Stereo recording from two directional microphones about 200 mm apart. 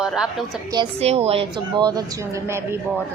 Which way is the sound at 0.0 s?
Centre (ahead or behind).